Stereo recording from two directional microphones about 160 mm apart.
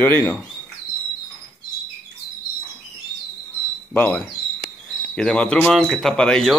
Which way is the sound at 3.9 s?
10° left (ahead or behind).